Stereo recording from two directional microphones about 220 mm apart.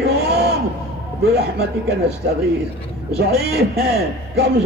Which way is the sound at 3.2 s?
45° right (ahead or behind).